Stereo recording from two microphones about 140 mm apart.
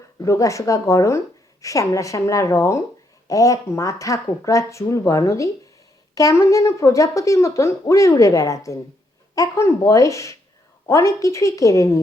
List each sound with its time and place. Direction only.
0.2 s speech: 20° left (ahead or behind)